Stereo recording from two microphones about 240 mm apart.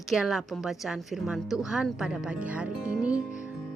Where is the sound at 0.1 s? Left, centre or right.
Centre.